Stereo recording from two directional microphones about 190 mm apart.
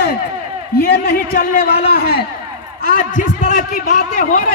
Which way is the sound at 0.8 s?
55° left (ahead or behind).